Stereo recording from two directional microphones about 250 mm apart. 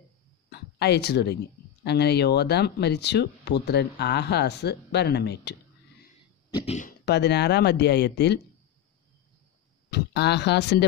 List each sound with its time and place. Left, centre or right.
0.5 s a sound: left
1.9 s speech: left
6.5 s throat clearing: left
7.1 s speech: left
9.8 s speech: left